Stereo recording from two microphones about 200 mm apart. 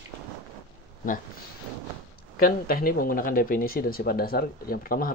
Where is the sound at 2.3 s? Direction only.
45° left (ahead or behind).